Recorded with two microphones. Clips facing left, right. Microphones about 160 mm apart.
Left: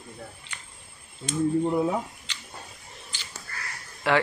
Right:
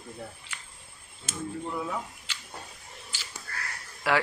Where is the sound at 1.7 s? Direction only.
35° left (ahead or behind).